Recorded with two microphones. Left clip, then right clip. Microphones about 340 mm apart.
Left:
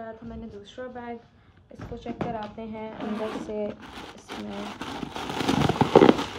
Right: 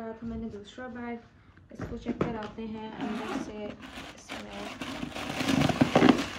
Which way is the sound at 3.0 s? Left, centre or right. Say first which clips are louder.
Left 3 dB; centre.